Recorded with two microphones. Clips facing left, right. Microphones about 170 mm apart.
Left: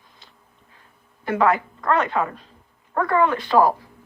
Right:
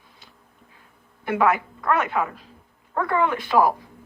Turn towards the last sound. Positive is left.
turn(degrees=-15)  # may be behind; listen again after turning